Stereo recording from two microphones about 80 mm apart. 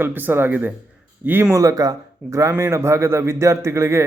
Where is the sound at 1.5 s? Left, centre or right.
Right.